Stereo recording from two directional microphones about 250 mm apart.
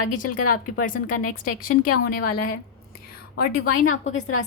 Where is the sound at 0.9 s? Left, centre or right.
Left.